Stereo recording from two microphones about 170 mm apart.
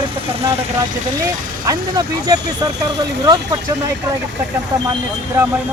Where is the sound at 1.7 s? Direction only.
20° right (ahead or behind).